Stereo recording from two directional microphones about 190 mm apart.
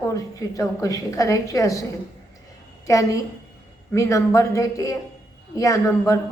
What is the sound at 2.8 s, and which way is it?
Speech, 15° left (ahead or behind).